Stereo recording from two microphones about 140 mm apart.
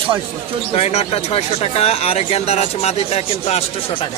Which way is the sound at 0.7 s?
45° left (ahead or behind).